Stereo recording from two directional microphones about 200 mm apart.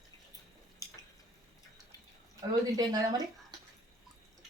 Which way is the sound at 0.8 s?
15° left (ahead or behind).